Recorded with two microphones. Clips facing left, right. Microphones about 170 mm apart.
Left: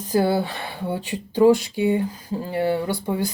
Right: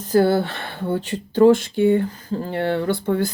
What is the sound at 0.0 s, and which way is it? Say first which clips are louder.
Speech: right 3 dB; centre (ahead or behind).